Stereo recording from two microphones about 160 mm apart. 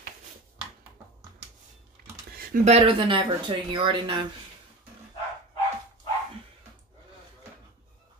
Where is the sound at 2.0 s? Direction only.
65° right (ahead or behind).